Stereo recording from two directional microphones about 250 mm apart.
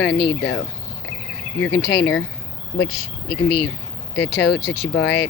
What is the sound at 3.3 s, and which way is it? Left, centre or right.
Speech, left.